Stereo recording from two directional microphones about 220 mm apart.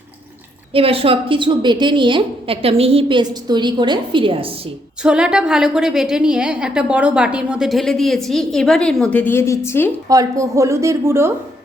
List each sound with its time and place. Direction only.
0.7 s a woman's voice: 25° right (ahead or behind)
5.0 s a woman's voice: 5° right (ahead or behind)
10.1 s speech: 15° right (ahead or behind)